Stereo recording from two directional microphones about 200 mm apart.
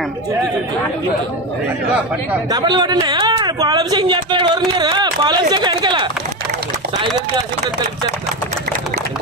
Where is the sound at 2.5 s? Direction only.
20° right (ahead or behind).